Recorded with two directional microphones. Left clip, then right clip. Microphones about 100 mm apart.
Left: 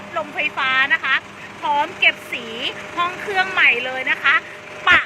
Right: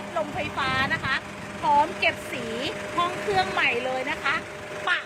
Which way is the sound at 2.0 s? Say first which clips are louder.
Left 7 dB; 40° right (ahead or behind).